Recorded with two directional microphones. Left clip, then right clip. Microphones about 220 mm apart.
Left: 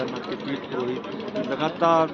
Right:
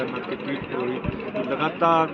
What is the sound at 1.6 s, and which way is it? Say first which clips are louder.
Speech: even; 10° right (ahead or behind).